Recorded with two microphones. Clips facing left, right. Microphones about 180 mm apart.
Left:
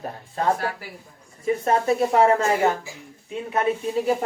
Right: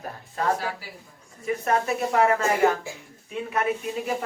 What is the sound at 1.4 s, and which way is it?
Speech, 30° left (ahead or behind).